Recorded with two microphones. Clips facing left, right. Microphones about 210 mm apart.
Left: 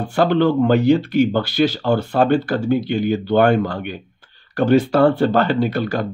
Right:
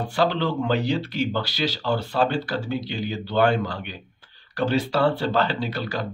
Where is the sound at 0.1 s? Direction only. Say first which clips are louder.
Left 8 dB; 55° left (ahead or behind).